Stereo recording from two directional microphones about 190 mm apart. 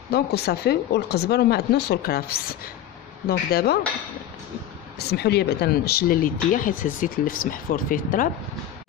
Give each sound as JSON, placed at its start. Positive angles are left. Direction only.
{"t": 0.1, "sound": "speech", "side_deg": 55}
{"t": 4.9, "sound": "speech", "side_deg": 60}